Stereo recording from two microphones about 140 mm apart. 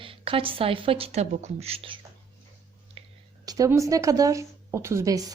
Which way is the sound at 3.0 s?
45° right (ahead or behind).